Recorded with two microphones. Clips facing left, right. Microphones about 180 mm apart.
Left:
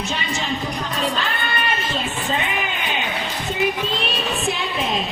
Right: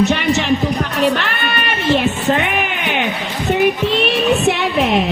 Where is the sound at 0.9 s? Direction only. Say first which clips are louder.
Right 6 dB; 70° right (ahead or behind).